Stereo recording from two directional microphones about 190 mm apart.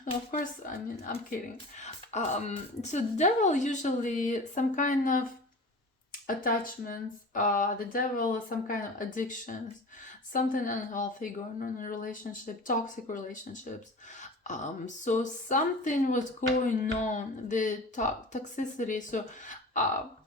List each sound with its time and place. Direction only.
0.0 s speech: 45° left (ahead or behind)
6.2 s speech: 50° left (ahead or behind)